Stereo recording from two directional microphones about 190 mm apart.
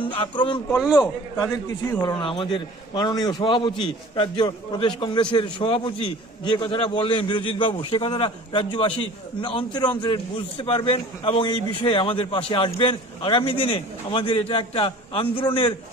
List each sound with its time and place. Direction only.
0.0 s speech: 25° left (ahead or behind)
0.7 s a man's voice: centre (ahead or behind)
1.7 s a man's voice: 20° left (ahead or behind)